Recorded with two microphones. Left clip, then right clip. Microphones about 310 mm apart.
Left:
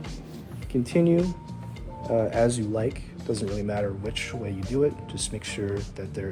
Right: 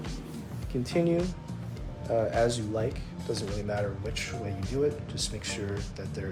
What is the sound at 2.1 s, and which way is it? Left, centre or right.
Speech, left.